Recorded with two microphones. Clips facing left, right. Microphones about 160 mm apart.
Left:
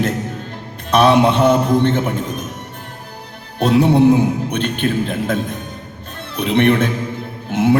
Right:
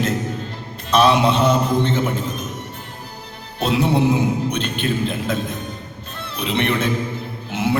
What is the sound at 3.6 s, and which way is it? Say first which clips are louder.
A man's voice: left 6 dB; 50° left (ahead or behind).